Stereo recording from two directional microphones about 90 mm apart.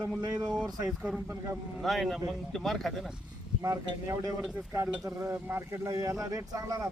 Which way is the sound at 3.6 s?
35° right (ahead or behind).